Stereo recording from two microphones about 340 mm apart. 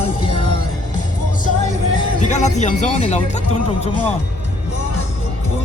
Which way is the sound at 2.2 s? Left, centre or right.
Left.